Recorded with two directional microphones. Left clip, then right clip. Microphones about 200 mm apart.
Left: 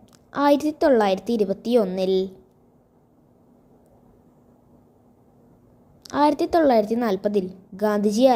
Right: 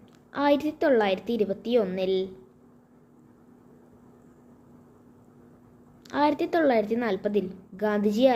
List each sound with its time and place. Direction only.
0.3 s a woman's voice: 40° left (ahead or behind)
6.0 s a woman's voice: 40° left (ahead or behind)